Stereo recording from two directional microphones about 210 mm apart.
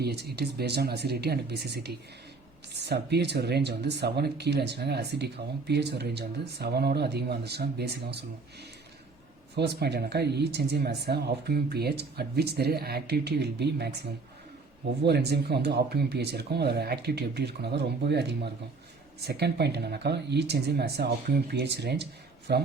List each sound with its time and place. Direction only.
0.0 s speech: 50° right (ahead or behind)
9.6 s speech: 50° right (ahead or behind)